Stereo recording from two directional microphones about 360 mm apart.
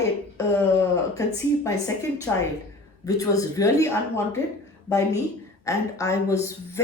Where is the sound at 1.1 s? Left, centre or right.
Centre.